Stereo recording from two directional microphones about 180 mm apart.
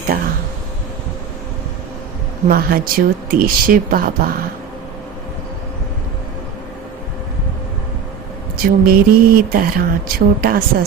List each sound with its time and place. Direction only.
0.1 s speech: 55° right (ahead or behind)
2.5 s speech: 55° right (ahead or behind)
8.5 s speech: 55° right (ahead or behind)